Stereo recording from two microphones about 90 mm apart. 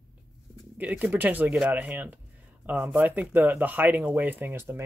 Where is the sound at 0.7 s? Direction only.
15° right (ahead or behind).